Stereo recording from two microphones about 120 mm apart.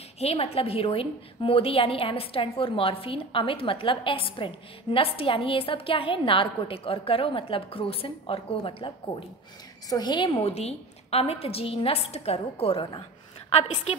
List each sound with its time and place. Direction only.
0.2 s a woman's voice: 55° left (ahead or behind)
9.8 s a woman's voice: 35° left (ahead or behind)
10.4 s a woman's voice: 60° left (ahead or behind)